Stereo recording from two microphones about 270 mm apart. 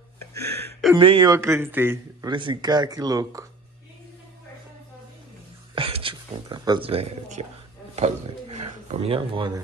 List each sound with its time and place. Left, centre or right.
0.9 s speech: centre
5.8 s speech: centre